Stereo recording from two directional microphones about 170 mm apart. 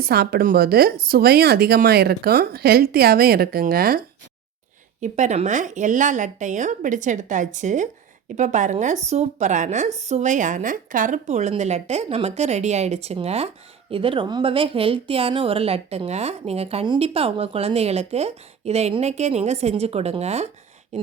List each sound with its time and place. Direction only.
0.0 s a woman's voice: 65° right (ahead or behind)
4.9 s a woman's voice: 45° right (ahead or behind)